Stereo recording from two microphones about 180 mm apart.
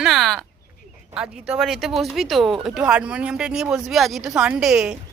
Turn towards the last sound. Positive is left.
turn(degrees=-5)  # may be behind; listen again after turning